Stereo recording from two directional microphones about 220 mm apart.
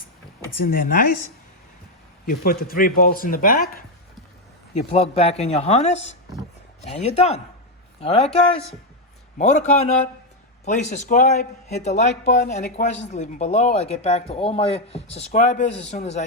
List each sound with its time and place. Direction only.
0.6 s speech: 40° left (ahead or behind)
2.2 s speech: 40° left (ahead or behind)
4.7 s speech: 30° left (ahead or behind)